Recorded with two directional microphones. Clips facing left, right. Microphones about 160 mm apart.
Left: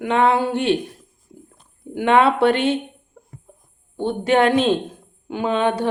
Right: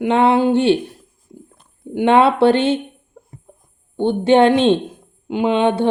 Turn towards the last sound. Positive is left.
turn(degrees=-25)  # may be behind; listen again after turning